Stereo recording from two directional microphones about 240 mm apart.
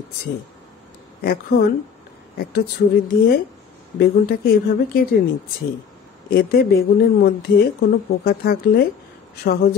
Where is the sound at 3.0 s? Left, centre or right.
Left.